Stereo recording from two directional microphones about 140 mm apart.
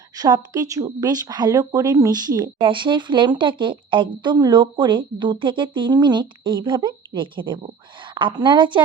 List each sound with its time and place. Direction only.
0.2 s speech: 25° right (ahead or behind)